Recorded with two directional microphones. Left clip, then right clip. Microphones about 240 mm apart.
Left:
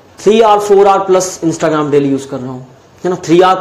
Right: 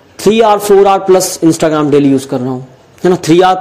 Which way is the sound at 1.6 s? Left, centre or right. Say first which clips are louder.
Left 1 dB; right.